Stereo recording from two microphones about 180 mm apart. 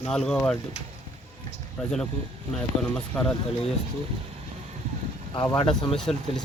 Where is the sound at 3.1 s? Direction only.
10° left (ahead or behind).